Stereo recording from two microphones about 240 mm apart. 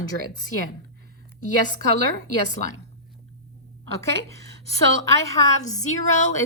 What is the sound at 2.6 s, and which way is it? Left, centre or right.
Speech, left.